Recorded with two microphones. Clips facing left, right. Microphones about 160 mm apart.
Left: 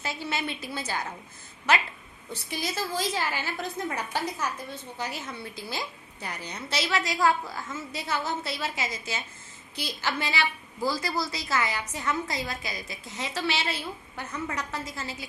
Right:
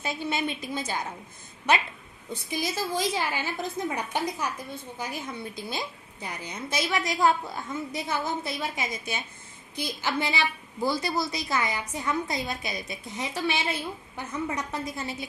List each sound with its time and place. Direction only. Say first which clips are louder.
0.0 s a woman's voice: right 3 dB; 20° right (ahead or behind)
2.5 s a woman's voice: right 2 dB; 10° right (ahead or behind)